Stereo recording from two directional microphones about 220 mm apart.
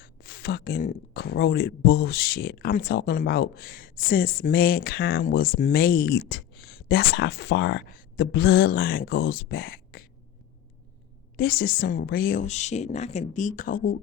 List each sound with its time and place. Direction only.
0.0 s speech: 45° left (ahead or behind)
11.3 s a woman's voice: 40° left (ahead or behind)